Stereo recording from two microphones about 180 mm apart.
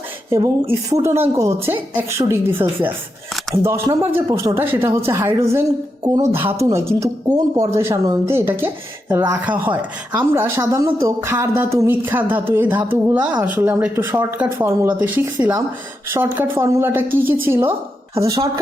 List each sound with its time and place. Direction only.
0.3 s a woman's voice: 15° right (ahead or behind)